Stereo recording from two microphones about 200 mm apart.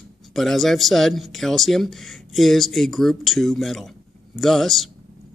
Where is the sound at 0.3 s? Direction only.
Centre (ahead or behind).